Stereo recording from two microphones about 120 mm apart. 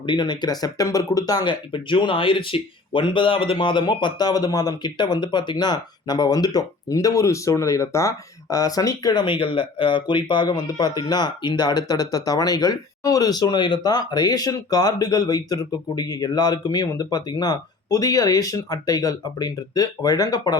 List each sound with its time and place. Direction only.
0.0 s speech: 40° left (ahead or behind)